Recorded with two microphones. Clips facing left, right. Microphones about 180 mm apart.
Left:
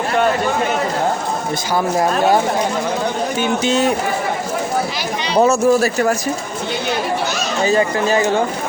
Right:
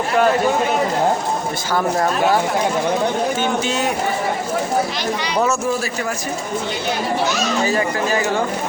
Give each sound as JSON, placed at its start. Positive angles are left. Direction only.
{"t": 3.4, "sound": "speech", "side_deg": 20}
{"t": 5.3, "sound": "speech", "side_deg": 30}
{"t": 7.6, "sound": "speech", "side_deg": 25}